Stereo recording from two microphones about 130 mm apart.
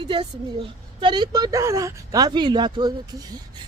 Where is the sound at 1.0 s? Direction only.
35° right (ahead or behind).